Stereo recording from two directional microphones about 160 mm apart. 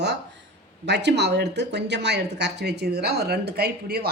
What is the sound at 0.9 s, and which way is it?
Speech, 90° right.